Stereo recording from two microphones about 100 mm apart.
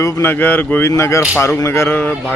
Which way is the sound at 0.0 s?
30° left (ahead or behind).